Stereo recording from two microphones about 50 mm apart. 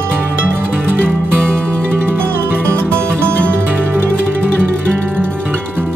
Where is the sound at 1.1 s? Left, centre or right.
Right.